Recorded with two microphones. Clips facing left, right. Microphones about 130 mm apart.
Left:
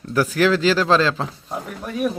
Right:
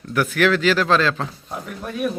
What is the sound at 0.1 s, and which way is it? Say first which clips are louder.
A man's voice: left 1 dB; 30° left (ahead or behind).